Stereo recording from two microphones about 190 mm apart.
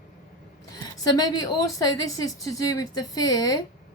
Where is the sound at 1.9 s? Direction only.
20° left (ahead or behind).